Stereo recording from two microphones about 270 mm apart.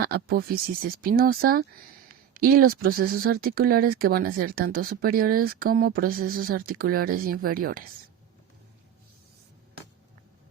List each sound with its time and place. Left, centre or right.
0.0 s speech: right